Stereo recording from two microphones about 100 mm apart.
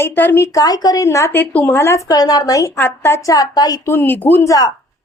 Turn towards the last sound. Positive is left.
turn(degrees=35)  # may be behind; listen again after turning